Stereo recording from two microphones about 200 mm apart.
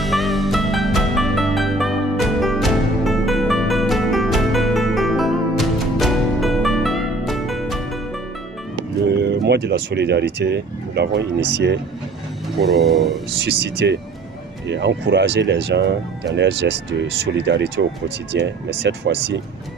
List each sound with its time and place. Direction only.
0.0 s music: centre (ahead or behind)
9.0 s speech: 55° right (ahead or behind)
12.5 s speech: centre (ahead or behind)
13.8 s speech: 60° right (ahead or behind)